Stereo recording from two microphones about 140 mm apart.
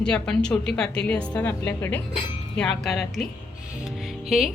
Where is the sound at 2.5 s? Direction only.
5° left (ahead or behind).